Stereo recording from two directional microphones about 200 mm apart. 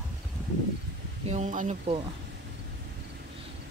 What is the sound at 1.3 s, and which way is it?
Speech, 40° right (ahead or behind).